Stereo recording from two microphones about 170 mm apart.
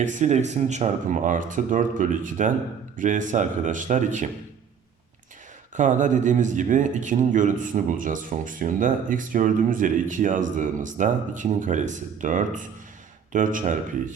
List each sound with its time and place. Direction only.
0.0 s speech: 45° right (ahead or behind)
5.7 s speech: 45° right (ahead or behind)